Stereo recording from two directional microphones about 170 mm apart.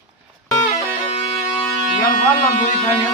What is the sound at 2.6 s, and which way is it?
Speech, 40° left (ahead or behind).